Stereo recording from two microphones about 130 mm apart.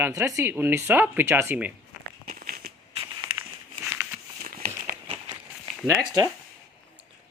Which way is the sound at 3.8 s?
10° right (ahead or behind).